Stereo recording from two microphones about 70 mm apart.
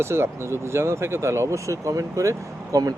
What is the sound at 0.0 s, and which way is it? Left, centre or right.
Speech, right.